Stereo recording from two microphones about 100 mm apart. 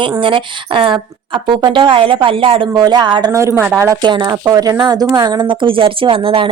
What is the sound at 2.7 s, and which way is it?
Speech, 45° right (ahead or behind).